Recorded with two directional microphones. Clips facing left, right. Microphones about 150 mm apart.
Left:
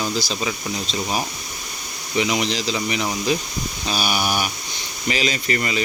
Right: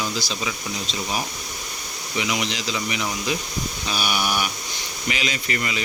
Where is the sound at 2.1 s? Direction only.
35° left (ahead or behind).